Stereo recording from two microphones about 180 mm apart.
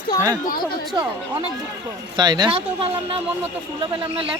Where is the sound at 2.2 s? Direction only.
25° right (ahead or behind).